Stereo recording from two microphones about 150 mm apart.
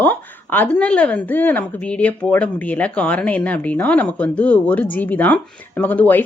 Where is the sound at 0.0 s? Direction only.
10° left (ahead or behind).